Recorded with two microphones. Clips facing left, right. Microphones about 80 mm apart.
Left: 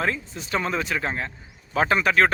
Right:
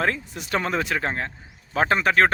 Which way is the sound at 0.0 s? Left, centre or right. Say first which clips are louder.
Right 2 dB; right.